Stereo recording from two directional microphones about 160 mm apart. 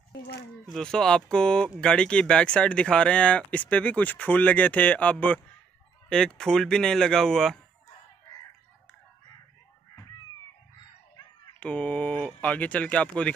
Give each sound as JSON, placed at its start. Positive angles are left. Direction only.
{"t": 0.1, "sound": "speech", "side_deg": 90}
{"t": 0.7, "sound": "speech", "side_deg": 5}
{"t": 11.6, "sound": "speech", "side_deg": 10}